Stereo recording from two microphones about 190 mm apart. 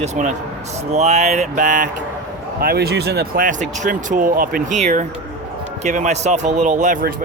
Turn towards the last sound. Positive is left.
turn(degrees=-45)  # may be behind; listen again after turning